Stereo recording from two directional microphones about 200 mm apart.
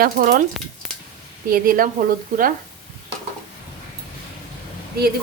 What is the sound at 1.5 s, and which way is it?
Speech, 45° right (ahead or behind).